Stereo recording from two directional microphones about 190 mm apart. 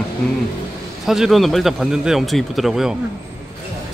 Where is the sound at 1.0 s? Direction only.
Centre (ahead or behind).